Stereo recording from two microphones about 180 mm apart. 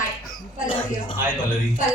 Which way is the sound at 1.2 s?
50° left (ahead or behind).